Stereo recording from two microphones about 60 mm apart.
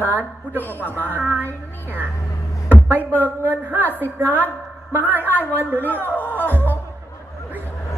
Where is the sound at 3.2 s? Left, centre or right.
Right.